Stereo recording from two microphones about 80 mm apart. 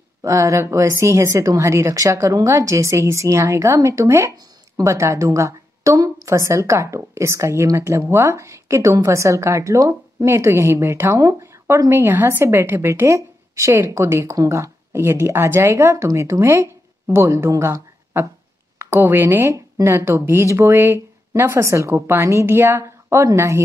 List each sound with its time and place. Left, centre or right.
0.2 s a woman's voice: right
19.5 s a woman's voice: right